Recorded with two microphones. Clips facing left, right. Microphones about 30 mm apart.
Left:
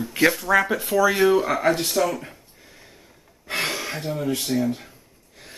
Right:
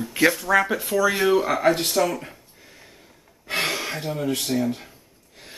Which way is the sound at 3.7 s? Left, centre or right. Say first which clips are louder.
Right 1 dB; centre.